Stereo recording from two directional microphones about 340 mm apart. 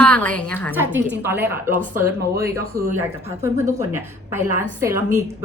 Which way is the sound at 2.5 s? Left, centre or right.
Right.